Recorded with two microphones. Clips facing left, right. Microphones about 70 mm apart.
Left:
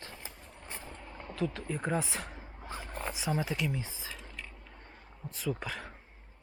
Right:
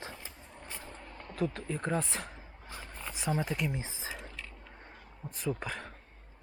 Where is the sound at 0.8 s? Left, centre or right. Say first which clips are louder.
Left 1 dB; centre.